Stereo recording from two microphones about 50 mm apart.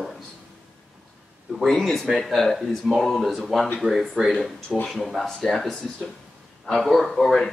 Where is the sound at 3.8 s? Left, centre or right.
Right.